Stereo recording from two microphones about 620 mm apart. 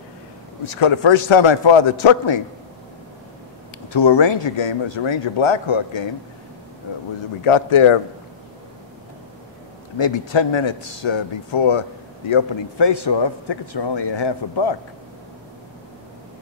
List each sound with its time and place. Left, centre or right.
0.7 s speech: left
3.9 s speech: left
7.4 s speech: left
9.9 s speech: left